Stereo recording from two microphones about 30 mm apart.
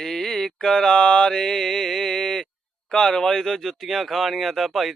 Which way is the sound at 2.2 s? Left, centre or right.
Left.